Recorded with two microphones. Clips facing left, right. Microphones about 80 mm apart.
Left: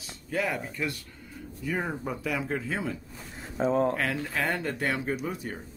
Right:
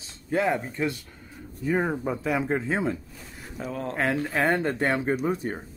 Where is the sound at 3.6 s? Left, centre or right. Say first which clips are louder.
Left 8 dB; left.